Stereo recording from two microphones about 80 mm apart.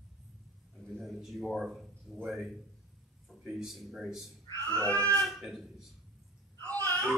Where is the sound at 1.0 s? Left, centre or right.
Centre.